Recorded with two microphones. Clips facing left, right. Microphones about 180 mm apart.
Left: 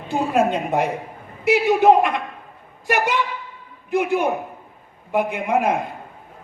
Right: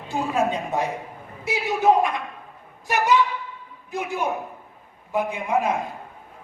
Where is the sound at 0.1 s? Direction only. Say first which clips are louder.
Left 4 dB; 65° left (ahead or behind).